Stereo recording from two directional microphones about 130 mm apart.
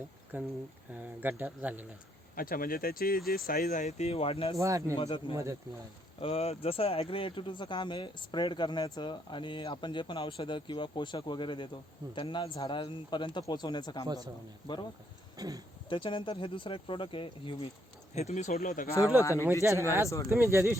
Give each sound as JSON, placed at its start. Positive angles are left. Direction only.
{"t": 0.3, "sound": "speech", "side_deg": -15}
{"t": 2.3, "sound": "speech", "side_deg": 90}
{"t": 3.7, "sound": "speech", "side_deg": 65}
{"t": 4.5, "sound": "speech", "side_deg": -25}
{"t": 4.9, "sound": "speech", "side_deg": 45}
{"t": 5.3, "sound": "speech", "side_deg": -25}
{"t": 6.2, "sound": "speech", "side_deg": 50}
{"t": 15.4, "sound": "speech", "side_deg": -30}
{"t": 15.9, "sound": "speech", "side_deg": 40}
{"t": 18.1, "sound": "speech", "side_deg": 60}
{"t": 18.9, "sound": "speech", "side_deg": 25}
{"t": 20.3, "sound": "speech", "side_deg": -20}